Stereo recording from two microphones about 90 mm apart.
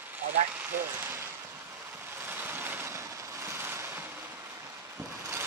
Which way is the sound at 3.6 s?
25° right (ahead or behind).